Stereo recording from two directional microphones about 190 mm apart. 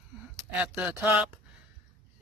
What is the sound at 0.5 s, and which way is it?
Speech, 5° right (ahead or behind).